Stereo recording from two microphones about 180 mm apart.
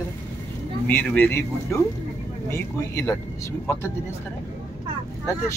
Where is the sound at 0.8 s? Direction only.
10° left (ahead or behind).